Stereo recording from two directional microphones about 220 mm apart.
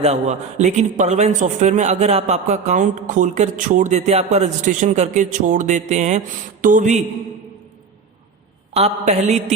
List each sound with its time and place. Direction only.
0.0 s a man's voice: 30° right (ahead or behind)
8.7 s a man's voice: 30° right (ahead or behind)